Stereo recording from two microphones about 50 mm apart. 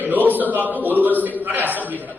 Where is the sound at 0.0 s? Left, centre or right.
Right.